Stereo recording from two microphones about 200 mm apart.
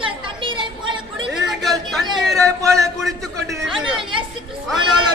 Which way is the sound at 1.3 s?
Centre (ahead or behind).